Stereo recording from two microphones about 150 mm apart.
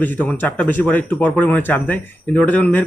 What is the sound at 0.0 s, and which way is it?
Speech, 10° left (ahead or behind).